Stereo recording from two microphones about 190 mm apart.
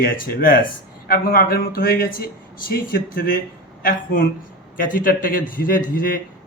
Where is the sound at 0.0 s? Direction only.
50° left (ahead or behind).